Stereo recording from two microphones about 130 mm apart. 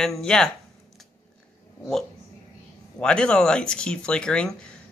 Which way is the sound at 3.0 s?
5° left (ahead or behind).